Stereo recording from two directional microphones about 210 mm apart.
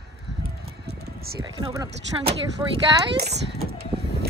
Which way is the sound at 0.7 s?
50° right (ahead or behind).